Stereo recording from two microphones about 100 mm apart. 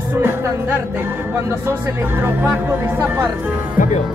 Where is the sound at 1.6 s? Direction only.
20° right (ahead or behind).